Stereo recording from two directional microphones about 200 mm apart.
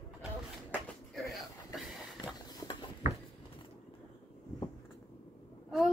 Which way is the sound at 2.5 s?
20° left (ahead or behind).